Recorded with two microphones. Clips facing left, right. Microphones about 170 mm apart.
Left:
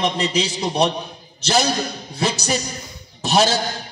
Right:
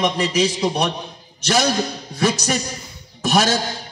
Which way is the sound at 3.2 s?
30° left (ahead or behind).